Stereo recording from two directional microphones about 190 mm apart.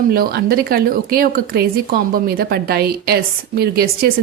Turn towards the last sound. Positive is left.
turn(degrees=-55)  # may be behind; listen again after turning